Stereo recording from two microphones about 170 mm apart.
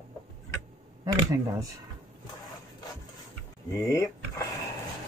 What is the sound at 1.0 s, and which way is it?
Speech, 20° right (ahead or behind).